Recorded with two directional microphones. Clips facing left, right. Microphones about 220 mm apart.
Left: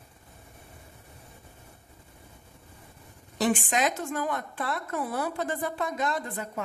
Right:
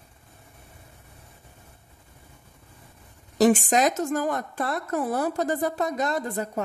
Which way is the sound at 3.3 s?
40° right (ahead or behind).